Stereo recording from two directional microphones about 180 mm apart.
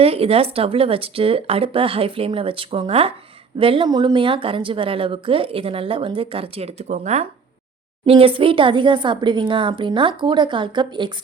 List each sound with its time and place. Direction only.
0.0 s a woman's voice: 35° right (ahead or behind)